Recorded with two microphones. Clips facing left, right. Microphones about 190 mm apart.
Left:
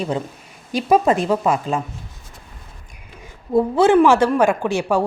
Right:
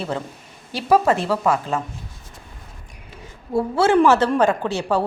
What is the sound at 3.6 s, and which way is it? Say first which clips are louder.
Speech: left 3 dB; 15° left (ahead or behind).